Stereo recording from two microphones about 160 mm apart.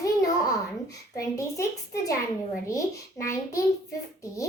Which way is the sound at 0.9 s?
20° left (ahead or behind).